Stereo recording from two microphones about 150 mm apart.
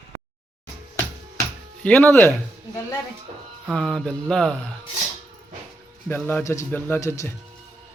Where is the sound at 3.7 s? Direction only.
5° left (ahead or behind).